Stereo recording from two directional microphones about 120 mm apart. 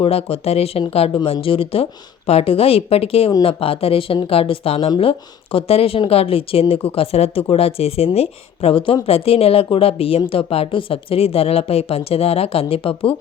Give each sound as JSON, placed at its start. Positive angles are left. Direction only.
{"t": 0.0, "sound": "a woman's voice", "side_deg": 55}